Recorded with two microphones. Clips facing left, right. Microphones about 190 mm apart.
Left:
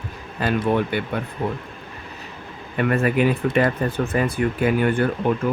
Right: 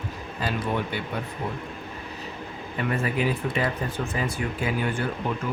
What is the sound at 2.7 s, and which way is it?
Speech, 60° left (ahead or behind).